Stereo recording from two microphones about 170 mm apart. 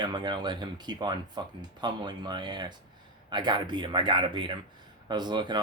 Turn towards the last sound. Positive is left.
turn(degrees=-25)  # may be behind; listen again after turning